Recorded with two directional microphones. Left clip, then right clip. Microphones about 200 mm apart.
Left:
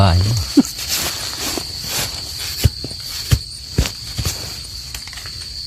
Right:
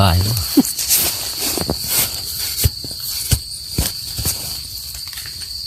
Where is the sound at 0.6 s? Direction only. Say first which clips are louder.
Even; 15° right (ahead or behind).